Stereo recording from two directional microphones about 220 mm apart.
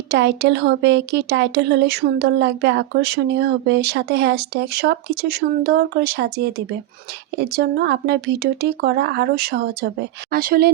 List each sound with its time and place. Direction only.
0.1 s speech: 50° right (ahead or behind)